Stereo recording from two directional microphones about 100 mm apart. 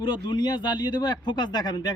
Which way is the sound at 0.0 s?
50° left (ahead or behind).